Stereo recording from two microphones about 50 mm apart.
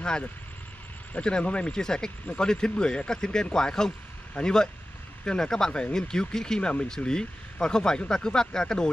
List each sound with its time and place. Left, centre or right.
1.1 s speech: left